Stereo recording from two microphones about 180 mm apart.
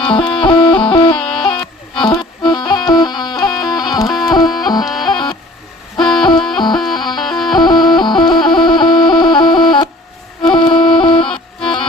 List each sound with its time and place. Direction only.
0.0 s music: 30° left (ahead or behind)
1.2 s a sound: 5° left (ahead or behind)
2.0 s music: 25° left (ahead or behind)
4.8 s music: centre (ahead or behind)
6.0 s music: 25° left (ahead or behind)